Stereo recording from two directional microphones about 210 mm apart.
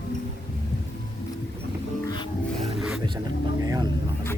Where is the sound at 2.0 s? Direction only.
20° left (ahead or behind).